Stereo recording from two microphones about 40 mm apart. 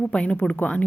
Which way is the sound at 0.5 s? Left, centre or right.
Left.